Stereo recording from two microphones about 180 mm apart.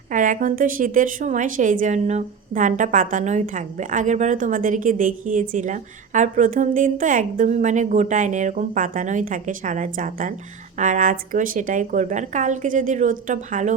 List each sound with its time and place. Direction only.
0.1 s a woman's voice: 45° right (ahead or behind)